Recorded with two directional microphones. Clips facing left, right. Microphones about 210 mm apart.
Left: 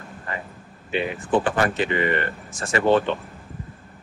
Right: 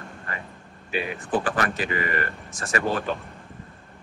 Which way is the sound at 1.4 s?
25° left (ahead or behind).